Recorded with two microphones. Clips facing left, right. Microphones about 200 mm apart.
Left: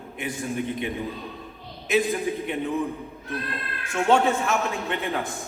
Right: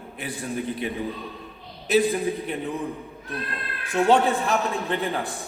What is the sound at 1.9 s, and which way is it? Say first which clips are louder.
Speech: right 2 dB; 35° right (ahead or behind).